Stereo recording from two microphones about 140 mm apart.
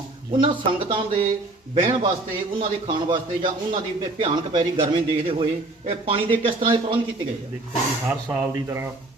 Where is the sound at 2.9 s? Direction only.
35° right (ahead or behind).